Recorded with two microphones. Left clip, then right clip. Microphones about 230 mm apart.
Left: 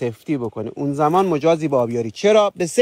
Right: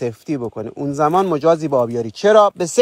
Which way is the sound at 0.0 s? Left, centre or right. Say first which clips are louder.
Right 1 dB; right.